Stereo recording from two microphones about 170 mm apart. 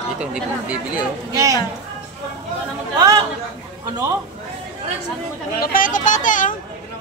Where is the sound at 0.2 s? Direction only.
5° right (ahead or behind).